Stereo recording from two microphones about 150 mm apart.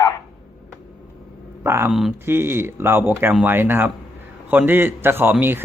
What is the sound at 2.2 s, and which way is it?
A man's voice, 15° right (ahead or behind).